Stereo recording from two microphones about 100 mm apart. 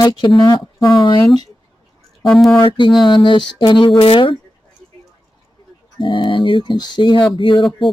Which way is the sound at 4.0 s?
65° left (ahead or behind).